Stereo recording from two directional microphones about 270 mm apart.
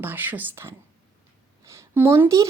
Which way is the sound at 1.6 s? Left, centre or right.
Centre.